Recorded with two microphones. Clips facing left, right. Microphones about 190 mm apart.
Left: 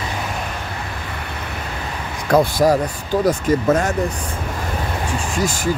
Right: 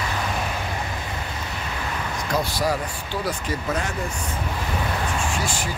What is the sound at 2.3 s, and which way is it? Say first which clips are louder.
Speech: left 10 dB; 50° left (ahead or behind).